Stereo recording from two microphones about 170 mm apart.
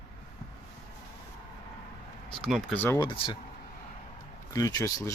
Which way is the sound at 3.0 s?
30° left (ahead or behind).